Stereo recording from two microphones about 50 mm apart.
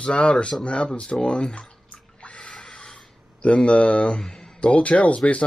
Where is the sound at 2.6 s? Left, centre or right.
Centre.